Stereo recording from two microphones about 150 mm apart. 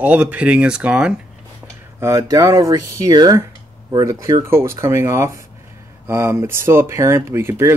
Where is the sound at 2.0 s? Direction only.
20° right (ahead or behind).